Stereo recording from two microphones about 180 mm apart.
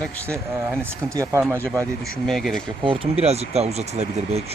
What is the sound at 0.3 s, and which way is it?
Speech, 15° right (ahead or behind).